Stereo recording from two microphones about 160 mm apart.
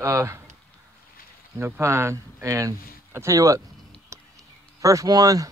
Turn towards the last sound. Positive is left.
turn(degrees=-20)  # may be behind; listen again after turning